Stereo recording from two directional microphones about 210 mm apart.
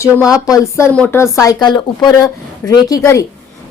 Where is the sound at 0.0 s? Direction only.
15° left (ahead or behind).